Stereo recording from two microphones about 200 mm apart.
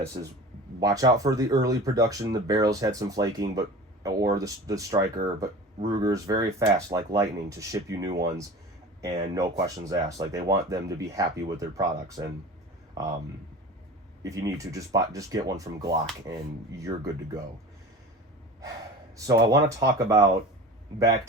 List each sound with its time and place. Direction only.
0.8 s speech: 20° right (ahead or behind)
12.9 s a sound: 20° right (ahead or behind)
14.3 s speech: 15° right (ahead or behind)
19.1 s speech: 15° right (ahead or behind)